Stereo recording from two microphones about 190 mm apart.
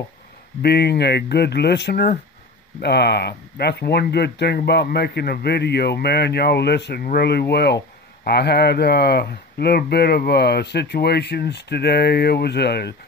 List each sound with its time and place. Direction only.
0.6 s speech: 60° left (ahead or behind)